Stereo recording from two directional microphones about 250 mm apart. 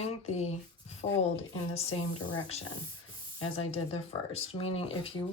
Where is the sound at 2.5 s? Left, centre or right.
Left.